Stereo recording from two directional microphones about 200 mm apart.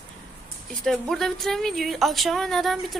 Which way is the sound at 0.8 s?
Centre (ahead or behind).